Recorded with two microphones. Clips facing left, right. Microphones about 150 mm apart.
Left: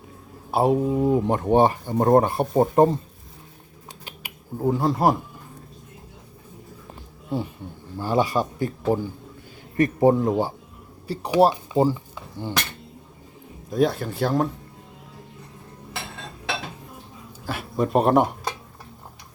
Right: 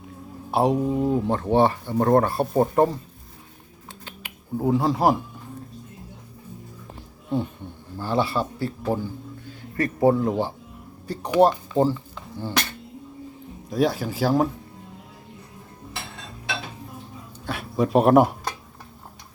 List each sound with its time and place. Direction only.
0.5 s speech: 5° left (ahead or behind); by 3.0 s 20° left (ahead or behind)
4.5 s speech: centre (ahead or behind)
7.9 s speech: 15° left (ahead or behind)
13.7 s speech: centre (ahead or behind)
17.4 s a sound: centre (ahead or behind)